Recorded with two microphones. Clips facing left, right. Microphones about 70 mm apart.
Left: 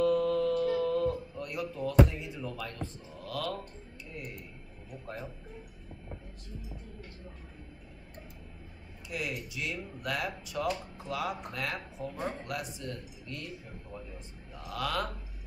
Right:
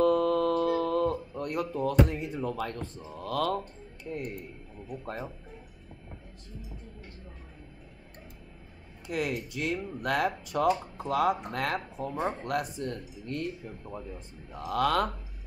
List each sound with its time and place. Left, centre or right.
0.0 s a sound: right
4.0 s speech: right
9.0 s speech: right
14.5 s speech: right